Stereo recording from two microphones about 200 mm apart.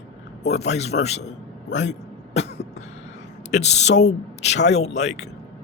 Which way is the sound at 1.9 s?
35° left (ahead or behind).